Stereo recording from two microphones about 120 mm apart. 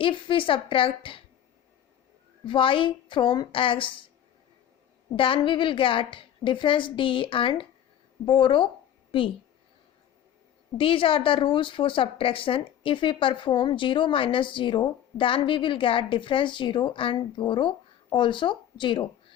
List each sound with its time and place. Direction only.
0.0 s a woman's voice: 45° left (ahead or behind)
2.5 s a woman's voice: 45° left (ahead or behind)
5.1 s a woman's voice: 45° left (ahead or behind)
10.8 s a woman's voice: 50° left (ahead or behind)